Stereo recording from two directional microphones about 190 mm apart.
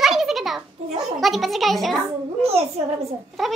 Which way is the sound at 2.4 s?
35° right (ahead or behind).